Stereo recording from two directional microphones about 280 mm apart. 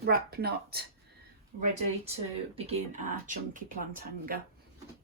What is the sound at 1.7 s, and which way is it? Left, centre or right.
Speech, right.